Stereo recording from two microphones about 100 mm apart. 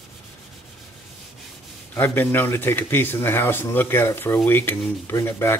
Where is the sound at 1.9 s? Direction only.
20° left (ahead or behind).